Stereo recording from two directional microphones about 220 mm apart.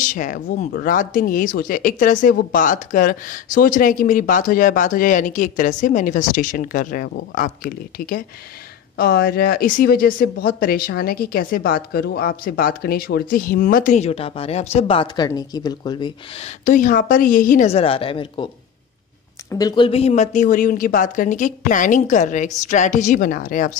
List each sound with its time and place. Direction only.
0.0 s speech: 35° left (ahead or behind)
19.5 s speech: 20° left (ahead or behind); by 23.7 s 35° left (ahead or behind)